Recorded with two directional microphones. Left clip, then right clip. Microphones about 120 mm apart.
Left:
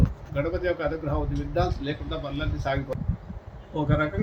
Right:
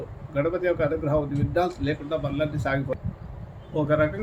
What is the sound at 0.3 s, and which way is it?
A man's voice, 20° right (ahead or behind).